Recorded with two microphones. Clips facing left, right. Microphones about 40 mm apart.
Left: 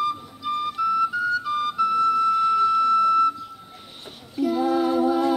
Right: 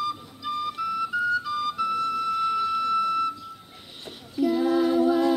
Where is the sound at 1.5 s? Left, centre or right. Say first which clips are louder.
Left 3 dB; left.